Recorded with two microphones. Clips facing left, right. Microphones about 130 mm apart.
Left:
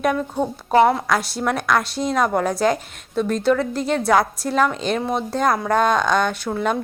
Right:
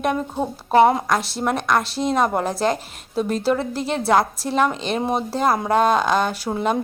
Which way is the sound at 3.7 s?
Centre (ahead or behind).